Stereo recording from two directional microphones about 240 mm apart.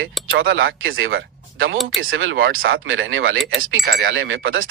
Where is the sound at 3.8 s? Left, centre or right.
Right.